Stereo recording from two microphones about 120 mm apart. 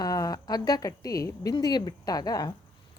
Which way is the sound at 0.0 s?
30° left (ahead or behind).